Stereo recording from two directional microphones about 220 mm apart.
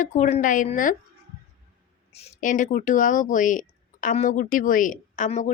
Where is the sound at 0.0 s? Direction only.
35° left (ahead or behind).